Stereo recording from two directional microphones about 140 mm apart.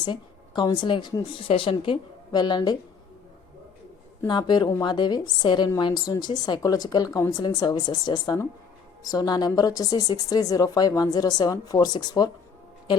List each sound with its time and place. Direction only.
0.0 s a woman's voice: 35° left (ahead or behind)
4.3 s a woman's voice: 30° left (ahead or behind)